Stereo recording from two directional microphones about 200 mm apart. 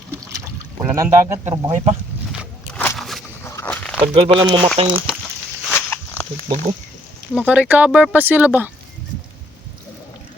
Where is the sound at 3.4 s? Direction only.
15° left (ahead or behind).